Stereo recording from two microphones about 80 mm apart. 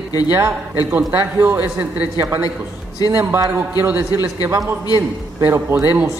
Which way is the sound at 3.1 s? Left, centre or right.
Right.